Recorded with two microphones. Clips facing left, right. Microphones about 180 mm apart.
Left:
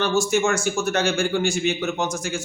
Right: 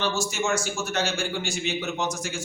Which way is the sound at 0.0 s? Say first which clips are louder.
Left 7 dB; 55° left (ahead or behind).